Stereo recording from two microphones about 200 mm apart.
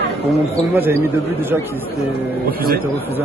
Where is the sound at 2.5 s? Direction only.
50° right (ahead or behind).